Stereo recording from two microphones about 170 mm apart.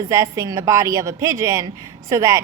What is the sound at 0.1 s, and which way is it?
A woman's voice, 20° right (ahead or behind).